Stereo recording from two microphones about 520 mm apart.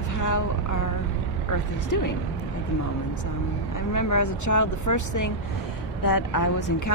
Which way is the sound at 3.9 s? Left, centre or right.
Left.